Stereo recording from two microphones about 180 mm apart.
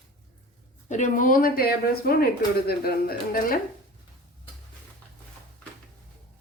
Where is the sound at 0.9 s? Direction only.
45° left (ahead or behind).